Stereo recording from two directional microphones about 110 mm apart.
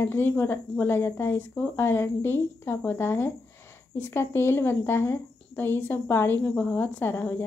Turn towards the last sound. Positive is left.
turn(degrees=20)  # may be behind; listen again after turning